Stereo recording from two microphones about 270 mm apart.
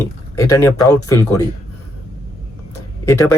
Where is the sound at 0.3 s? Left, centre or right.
Centre.